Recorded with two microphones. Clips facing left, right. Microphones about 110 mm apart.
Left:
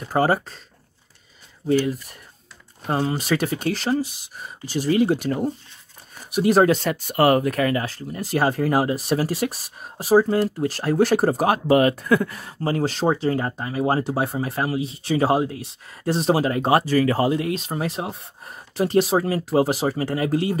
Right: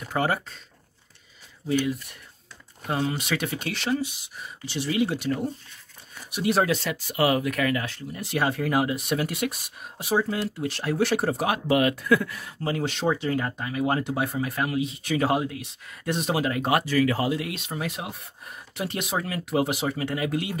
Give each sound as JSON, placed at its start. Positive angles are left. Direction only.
{"t": 0.1, "sound": "speech", "side_deg": 35}
{"t": 1.7, "sound": "speech", "side_deg": 40}